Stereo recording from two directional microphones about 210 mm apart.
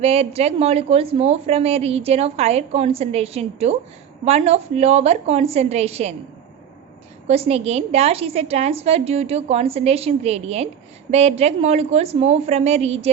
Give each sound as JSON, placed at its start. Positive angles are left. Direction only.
{"t": 0.0, "sound": "a woman's voice", "side_deg": -30}
{"t": 7.3, "sound": "a woman's voice", "side_deg": -30}